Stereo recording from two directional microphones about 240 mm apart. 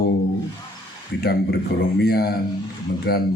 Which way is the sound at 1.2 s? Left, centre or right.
Left.